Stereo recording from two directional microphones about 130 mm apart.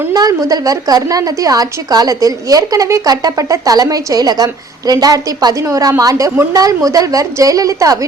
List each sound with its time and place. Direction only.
0.1 s a woman's voice: 30° right (ahead or behind)